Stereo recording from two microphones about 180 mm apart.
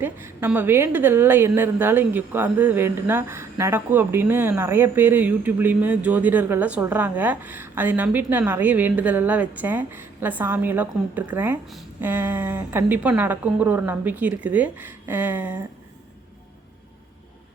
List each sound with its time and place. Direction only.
0.0 s a woman's voice: 10° right (ahead or behind)